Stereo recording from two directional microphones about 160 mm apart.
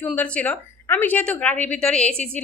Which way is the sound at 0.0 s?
10° left (ahead or behind).